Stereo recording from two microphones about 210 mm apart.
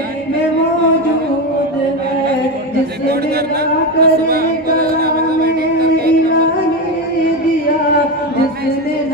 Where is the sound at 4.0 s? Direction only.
45° right (ahead or behind).